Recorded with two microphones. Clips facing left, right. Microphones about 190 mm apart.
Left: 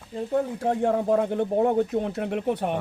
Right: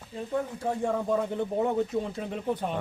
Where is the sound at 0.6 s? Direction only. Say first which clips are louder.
Left 5 dB; 60° left (ahead or behind).